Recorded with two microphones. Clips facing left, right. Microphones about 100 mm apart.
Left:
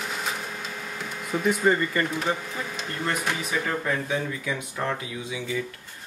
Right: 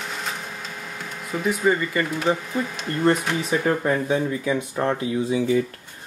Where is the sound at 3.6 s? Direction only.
35° right (ahead or behind).